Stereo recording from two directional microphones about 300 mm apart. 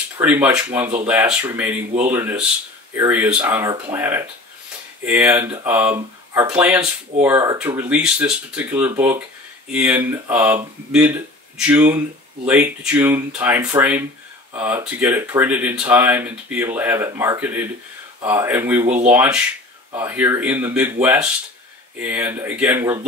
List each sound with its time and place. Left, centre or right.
0.2 s speech: centre